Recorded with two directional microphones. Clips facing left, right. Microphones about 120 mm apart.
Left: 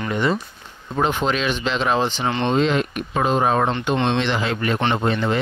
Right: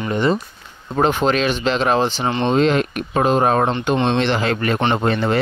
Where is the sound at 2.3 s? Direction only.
15° right (ahead or behind).